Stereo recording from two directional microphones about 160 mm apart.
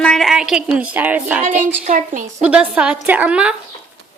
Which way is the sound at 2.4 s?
5° right (ahead or behind).